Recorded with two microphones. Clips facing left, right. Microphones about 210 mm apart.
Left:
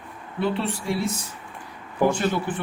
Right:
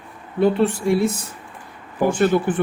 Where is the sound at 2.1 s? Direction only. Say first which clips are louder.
Right 9 dB; 55° right (ahead or behind).